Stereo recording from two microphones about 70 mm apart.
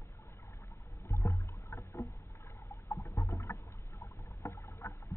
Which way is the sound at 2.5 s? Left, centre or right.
Left.